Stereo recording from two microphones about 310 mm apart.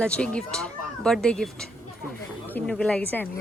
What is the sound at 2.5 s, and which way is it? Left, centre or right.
Speech, centre.